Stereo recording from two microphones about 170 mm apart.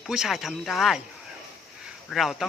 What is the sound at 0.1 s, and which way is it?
Speech, 5° right (ahead or behind).